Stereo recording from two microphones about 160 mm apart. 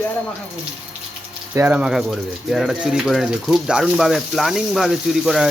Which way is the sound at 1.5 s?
10° right (ahead or behind).